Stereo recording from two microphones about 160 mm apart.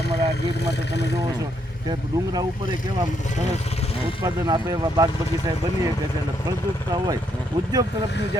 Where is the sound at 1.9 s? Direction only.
25° right (ahead or behind).